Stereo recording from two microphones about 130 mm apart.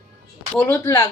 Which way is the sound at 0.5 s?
15° left (ahead or behind).